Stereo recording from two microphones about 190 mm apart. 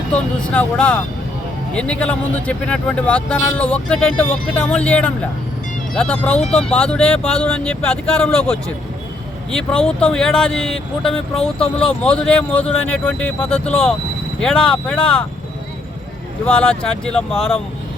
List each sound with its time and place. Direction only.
0.5 s speech: 5° left (ahead or behind)
16.5 s speech: 5° left (ahead or behind)
17.3 s speech: 30° left (ahead or behind)